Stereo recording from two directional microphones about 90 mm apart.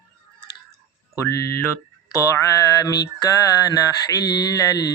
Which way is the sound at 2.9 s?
45° left (ahead or behind).